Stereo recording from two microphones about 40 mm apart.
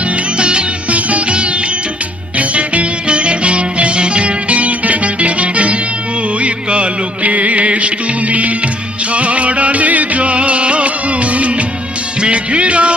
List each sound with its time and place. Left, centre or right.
0.3 s music: right
0.9 s sitar: right
2.4 s music: right